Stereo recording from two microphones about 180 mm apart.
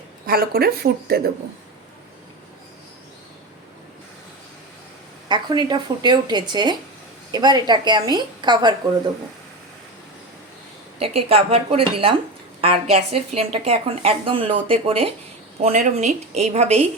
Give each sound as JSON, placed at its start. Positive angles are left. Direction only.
{"t": 0.3, "sound": "speech", "side_deg": -55}
{"t": 5.3, "sound": "a woman's voice", "side_deg": -25}
{"t": 11.0, "sound": "a woman's voice", "side_deg": -35}